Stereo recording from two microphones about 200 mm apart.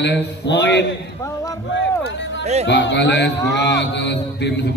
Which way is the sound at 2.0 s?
65° left (ahead or behind).